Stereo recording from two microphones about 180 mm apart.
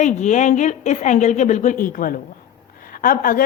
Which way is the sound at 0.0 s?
40° left (ahead or behind).